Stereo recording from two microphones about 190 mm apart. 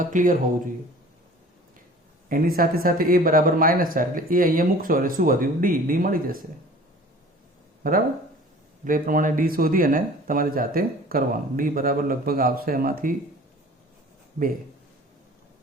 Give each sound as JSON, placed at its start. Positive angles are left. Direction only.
{"t": 0.0, "sound": "speech", "side_deg": -45}
{"t": 2.3, "sound": "speech", "side_deg": -50}
{"t": 7.8, "sound": "speech", "side_deg": -50}